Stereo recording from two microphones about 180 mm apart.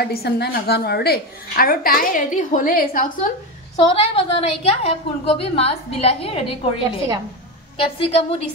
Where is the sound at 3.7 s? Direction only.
35° left (ahead or behind).